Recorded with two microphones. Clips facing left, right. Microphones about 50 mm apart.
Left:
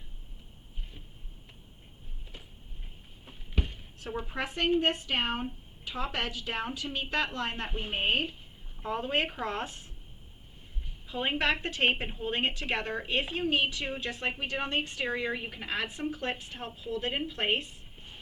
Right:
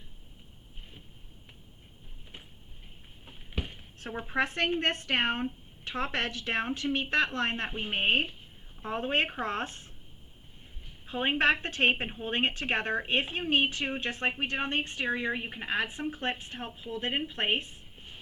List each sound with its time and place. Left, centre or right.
3.2 s a sound: centre
4.3 s a woman's voice: right
11.0 s a woman's voice: right